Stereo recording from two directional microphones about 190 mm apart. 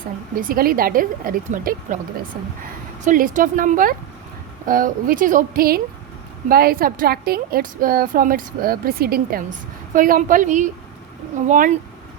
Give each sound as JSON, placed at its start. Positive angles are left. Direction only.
{"t": 0.3, "sound": "a woman's voice", "side_deg": -50}
{"t": 3.0, "sound": "a woman's voice", "side_deg": -45}